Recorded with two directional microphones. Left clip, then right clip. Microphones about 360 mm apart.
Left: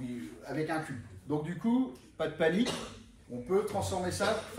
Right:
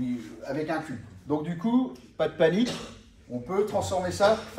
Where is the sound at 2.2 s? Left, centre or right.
Centre.